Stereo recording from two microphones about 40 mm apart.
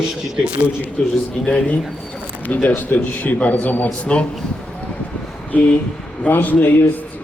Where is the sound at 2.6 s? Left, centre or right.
Left.